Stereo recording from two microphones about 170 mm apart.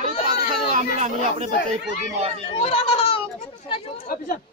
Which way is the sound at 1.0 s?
40° right (ahead or behind).